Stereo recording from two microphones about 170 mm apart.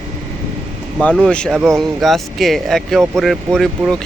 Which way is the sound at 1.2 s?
5° left (ahead or behind).